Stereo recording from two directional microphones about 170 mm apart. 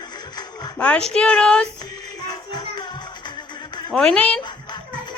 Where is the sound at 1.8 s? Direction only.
25° left (ahead or behind).